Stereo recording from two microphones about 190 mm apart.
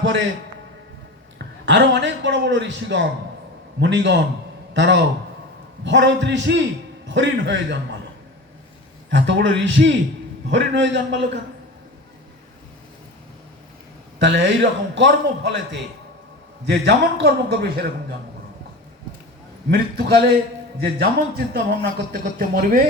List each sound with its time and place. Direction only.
1.4 s a man's voice: 70° right (ahead or behind)
9.0 s a man's voice: 70° right (ahead or behind)
14.2 s a man's voice: 70° right (ahead or behind)
19.7 s speech: 55° right (ahead or behind)